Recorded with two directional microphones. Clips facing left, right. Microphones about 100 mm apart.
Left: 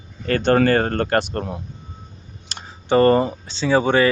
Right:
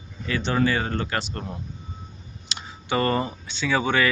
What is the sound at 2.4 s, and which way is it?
Speech, 40° left (ahead or behind).